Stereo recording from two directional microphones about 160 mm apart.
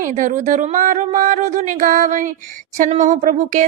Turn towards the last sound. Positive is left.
turn(degrees=-50)  # may be behind; listen again after turning